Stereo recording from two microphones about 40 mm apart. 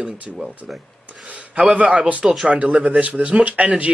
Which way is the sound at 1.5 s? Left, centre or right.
Right.